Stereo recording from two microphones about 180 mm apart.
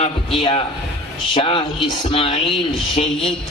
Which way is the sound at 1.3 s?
30° left (ahead or behind).